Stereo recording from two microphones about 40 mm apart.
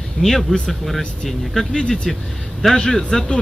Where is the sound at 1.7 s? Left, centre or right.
Centre.